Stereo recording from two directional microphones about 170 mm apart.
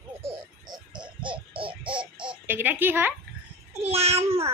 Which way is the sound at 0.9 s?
30° right (ahead or behind).